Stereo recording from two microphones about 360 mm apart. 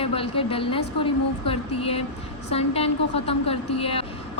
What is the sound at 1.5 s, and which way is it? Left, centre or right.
A woman's voice, centre.